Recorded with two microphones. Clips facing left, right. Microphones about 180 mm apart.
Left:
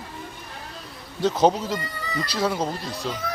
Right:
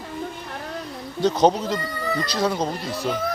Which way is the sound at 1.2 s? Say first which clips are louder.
Right 1 dB; 5° left (ahead or behind).